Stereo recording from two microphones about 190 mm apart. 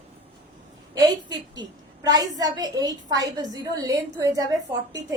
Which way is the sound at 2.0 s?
20° right (ahead or behind).